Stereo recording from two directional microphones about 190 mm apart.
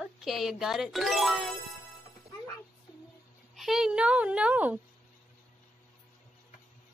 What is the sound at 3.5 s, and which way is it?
A child's voice, centre (ahead or behind).